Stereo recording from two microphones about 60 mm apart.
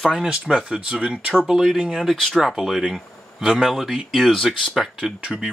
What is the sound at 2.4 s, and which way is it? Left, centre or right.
Speech, centre.